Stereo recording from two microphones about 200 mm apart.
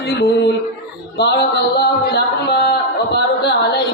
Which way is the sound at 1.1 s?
55° left (ahead or behind).